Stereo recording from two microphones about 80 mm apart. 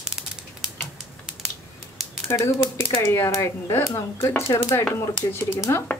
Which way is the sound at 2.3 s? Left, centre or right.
Left.